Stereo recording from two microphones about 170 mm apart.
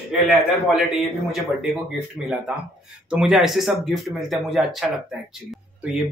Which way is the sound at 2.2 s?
5° right (ahead or behind).